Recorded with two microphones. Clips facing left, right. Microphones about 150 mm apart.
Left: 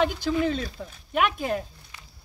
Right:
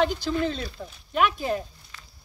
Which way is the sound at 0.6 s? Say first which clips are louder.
Even; 55° left (ahead or behind).